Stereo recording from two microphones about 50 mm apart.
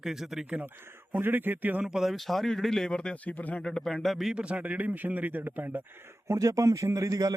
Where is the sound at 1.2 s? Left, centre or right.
Right.